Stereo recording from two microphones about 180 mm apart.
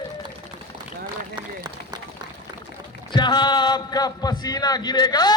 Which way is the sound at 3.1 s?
25° left (ahead or behind).